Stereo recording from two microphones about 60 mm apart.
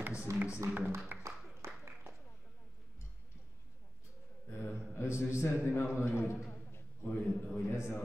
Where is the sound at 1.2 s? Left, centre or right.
Right.